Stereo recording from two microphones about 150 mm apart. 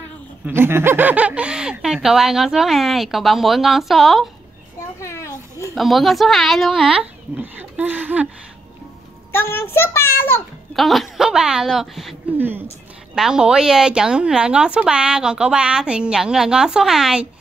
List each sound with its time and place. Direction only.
0.5 s a woman's voice: 15° right (ahead or behind); by 4.3 s centre (ahead or behind)
4.7 s children playing: 20° left (ahead or behind)
5.8 s a woman's voice: centre (ahead or behind)
9.3 s a child's voice: 15° left (ahead or behind)
10.8 s a woman's voice: centre (ahead or behind)
12.4 s a woman's voice: 15° right (ahead or behind)